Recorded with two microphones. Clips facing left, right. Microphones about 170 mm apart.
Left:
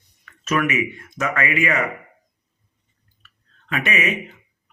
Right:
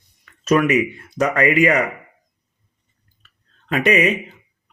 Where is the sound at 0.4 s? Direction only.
35° right (ahead or behind).